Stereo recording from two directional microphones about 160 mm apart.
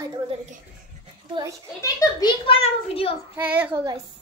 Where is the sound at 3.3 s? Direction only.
10° right (ahead or behind).